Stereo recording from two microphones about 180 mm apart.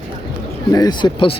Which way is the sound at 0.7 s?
25° left (ahead or behind).